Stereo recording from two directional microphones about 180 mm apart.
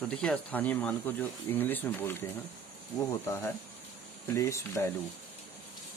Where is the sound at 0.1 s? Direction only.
5° left (ahead or behind).